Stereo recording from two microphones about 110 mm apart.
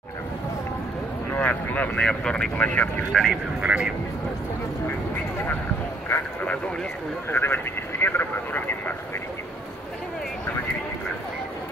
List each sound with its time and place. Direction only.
1.3 s speech: 15° left (ahead or behind)
3.6 s speech: 10° right (ahead or behind)
6.0 s speech: 15° left (ahead or behind)